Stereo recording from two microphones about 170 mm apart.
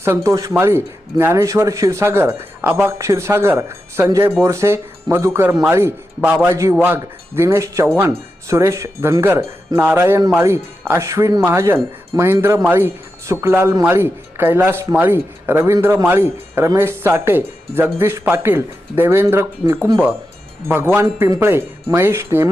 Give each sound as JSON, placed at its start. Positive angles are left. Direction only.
{"t": 0.0, "sound": "speech", "side_deg": -15}